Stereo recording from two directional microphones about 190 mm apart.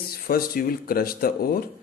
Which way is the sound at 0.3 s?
50° left (ahead or behind).